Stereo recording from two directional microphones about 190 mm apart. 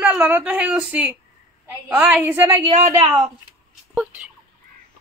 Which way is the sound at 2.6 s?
25° right (ahead or behind).